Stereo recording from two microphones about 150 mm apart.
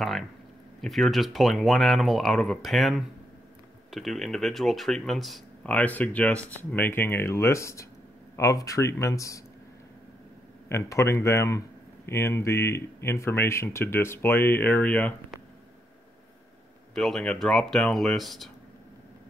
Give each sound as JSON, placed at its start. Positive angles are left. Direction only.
{"t": 0.7, "sound": "speech", "side_deg": 0}
{"t": 10.7, "sound": "speech", "side_deg": 20}
{"t": 16.9, "sound": "speech", "side_deg": 5}